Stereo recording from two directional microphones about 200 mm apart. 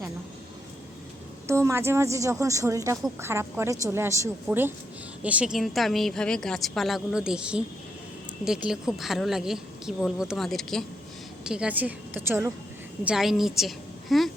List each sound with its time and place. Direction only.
1.5 s a woman's voice: 15° right (ahead or behind)